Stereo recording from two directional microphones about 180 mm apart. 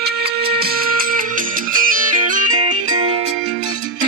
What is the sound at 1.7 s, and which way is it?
Music, 50° right (ahead or behind).